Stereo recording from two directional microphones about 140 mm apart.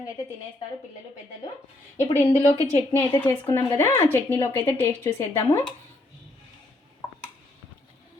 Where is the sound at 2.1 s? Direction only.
50° left (ahead or behind).